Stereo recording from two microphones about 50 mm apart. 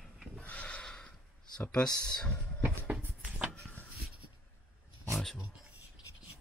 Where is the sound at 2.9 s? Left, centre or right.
Centre.